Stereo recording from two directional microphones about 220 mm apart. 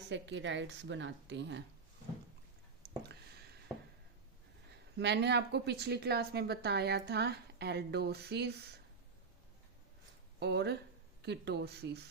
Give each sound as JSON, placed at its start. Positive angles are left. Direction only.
{"t": 0.1, "sound": "a woman's voice", "side_deg": -55}
{"t": 4.9, "sound": "a woman's voice", "side_deg": -50}
{"t": 10.4, "sound": "a woman's voice", "side_deg": -50}